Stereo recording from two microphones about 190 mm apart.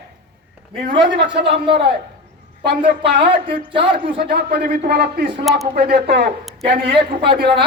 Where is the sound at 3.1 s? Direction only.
25° right (ahead or behind).